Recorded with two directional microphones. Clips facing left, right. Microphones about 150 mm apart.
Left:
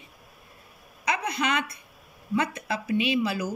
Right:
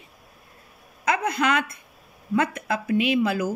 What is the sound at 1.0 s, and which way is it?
A woman's voice, 50° right (ahead or behind).